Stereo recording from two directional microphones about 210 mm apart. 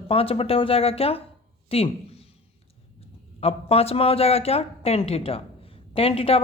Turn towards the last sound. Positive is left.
turn(degrees=25)  # may be behind; listen again after turning